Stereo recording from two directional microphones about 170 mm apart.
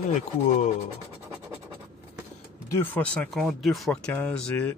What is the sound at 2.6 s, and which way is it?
Speech, 15° left (ahead or behind).